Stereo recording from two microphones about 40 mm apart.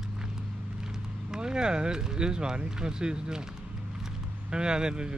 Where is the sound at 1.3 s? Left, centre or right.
Centre.